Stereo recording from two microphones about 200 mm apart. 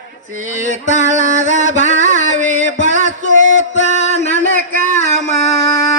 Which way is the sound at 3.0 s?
35° left (ahead or behind).